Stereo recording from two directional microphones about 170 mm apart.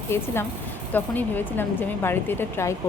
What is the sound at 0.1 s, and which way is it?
Speech, 15° left (ahead or behind).